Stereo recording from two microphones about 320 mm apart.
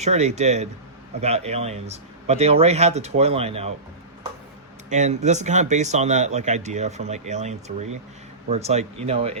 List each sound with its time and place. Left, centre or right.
0.0 s speech: right
4.9 s speech: right